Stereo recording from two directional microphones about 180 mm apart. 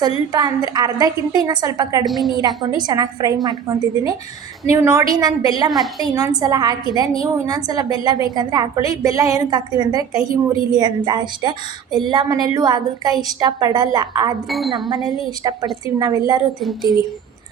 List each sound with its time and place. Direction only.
0.3 s a woman's voice: 20° right (ahead or behind)
2.0 s speech: centre (ahead or behind)
2.4 s a woman's voice: 20° right (ahead or behind)
16.6 s speech: centre (ahead or behind)